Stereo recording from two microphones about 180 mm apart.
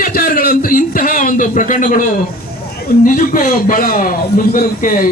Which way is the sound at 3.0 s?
50° left (ahead or behind).